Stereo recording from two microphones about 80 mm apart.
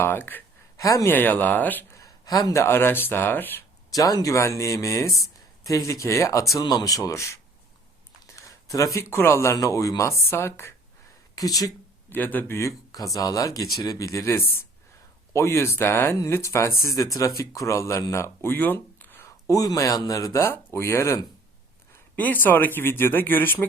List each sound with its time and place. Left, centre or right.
0.0 s speech: left
0.8 s speech: left
1.1 s speech: left
1.9 s speech: left
3.9 s speech: left
6.6 s speech: left
8.4 s speech: left
11.3 s speech: left
12.0 s speech: left
12.5 s speech: left
18.5 s a sound: left
19.5 s speech: left
21.9 s speech: left